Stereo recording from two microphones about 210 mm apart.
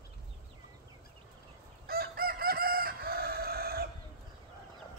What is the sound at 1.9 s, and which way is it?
Crowing, 45° right (ahead or behind).